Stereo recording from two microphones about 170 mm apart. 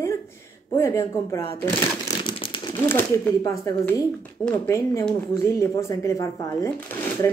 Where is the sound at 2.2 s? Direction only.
30° left (ahead or behind).